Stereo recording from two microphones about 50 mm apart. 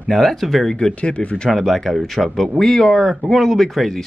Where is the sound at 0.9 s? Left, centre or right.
Left.